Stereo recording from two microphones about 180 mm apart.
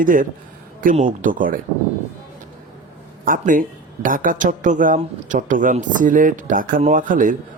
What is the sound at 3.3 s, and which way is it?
Speech, 50° right (ahead or behind).